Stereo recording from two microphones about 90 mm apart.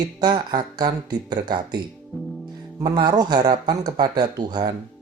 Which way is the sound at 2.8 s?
50° right (ahead or behind).